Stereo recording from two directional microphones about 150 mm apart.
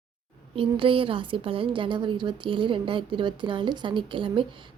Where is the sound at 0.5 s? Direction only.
35° right (ahead or behind).